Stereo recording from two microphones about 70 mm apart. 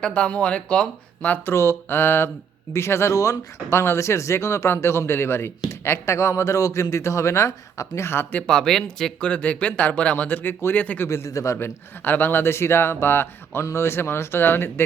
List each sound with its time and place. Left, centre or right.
0.0 s speech: centre
1.5 s speech: left
8.4 s speech: centre
9.3 s speech: centre
11.3 s speech: left
12.0 s speech: left